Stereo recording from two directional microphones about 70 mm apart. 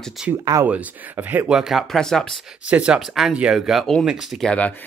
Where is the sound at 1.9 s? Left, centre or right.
Centre.